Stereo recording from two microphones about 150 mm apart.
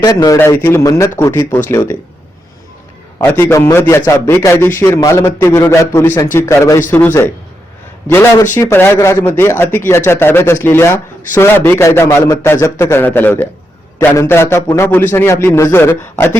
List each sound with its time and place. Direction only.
0.0 s speech: 25° left (ahead or behind)
3.2 s a man's voice: 15° left (ahead or behind)